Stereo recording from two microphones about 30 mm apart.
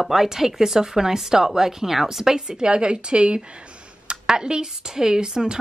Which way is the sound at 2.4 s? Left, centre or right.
Right.